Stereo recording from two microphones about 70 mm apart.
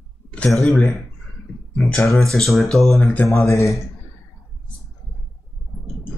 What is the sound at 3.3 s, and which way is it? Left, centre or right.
Speech, left.